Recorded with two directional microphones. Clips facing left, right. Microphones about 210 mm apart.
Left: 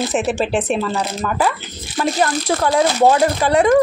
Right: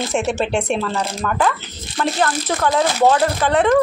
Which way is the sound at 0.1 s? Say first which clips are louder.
Left 1 dB; 5° left (ahead or behind).